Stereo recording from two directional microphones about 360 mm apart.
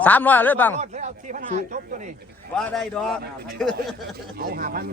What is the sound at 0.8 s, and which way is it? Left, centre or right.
Speech, centre.